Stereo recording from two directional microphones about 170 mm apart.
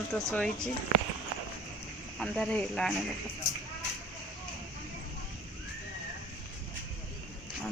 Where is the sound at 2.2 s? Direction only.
5° left (ahead or behind).